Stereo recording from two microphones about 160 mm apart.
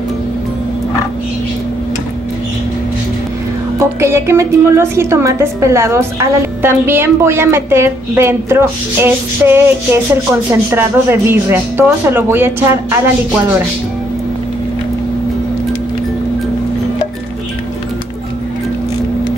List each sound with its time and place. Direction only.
3.8 s a woman's voice: 15° right (ahead or behind)